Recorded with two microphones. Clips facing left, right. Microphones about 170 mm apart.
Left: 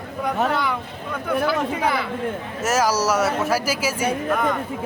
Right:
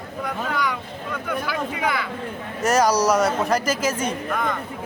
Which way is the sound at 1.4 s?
30° left (ahead or behind).